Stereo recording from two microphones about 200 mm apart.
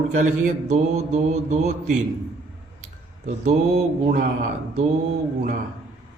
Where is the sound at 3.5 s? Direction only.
35° right (ahead or behind).